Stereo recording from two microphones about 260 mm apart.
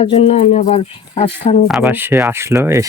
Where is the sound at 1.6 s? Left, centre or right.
Centre.